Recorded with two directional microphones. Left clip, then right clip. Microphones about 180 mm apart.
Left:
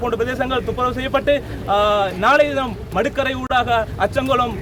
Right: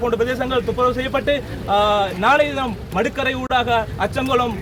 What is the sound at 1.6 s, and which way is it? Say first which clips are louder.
Speech: even; centre (ahead or behind).